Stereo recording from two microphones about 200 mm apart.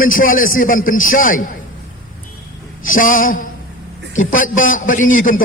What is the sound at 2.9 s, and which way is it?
A man's voice, 45° left (ahead or behind).